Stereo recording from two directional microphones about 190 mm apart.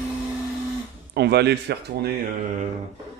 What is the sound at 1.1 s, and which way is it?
Speech, 60° right (ahead or behind).